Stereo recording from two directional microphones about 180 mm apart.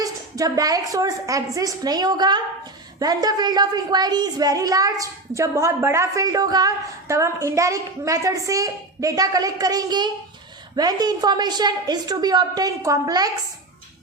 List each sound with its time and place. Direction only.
0.0 s a woman's voice: 20° right (ahead or behind)